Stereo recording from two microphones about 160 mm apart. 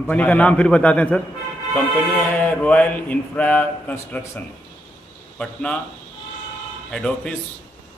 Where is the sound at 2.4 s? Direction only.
10° left (ahead or behind).